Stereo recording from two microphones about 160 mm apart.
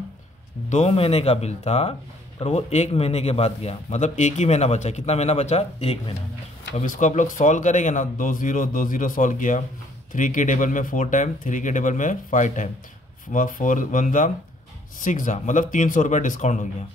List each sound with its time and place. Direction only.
0.7 s speech: 45° left (ahead or behind)
6.7 s speech: 50° left (ahead or behind)